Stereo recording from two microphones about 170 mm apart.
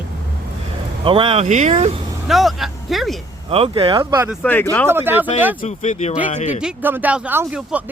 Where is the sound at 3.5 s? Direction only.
35° right (ahead or behind).